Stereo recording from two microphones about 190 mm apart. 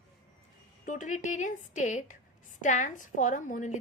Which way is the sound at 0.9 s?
45° left (ahead or behind).